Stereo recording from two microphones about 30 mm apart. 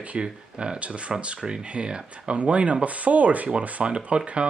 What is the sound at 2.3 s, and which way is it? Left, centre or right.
Speech, right.